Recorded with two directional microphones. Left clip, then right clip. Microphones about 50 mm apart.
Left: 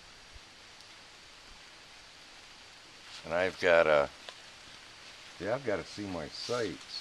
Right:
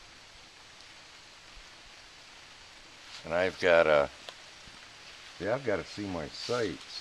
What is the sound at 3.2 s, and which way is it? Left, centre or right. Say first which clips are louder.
Speech: right 1 dB; centre.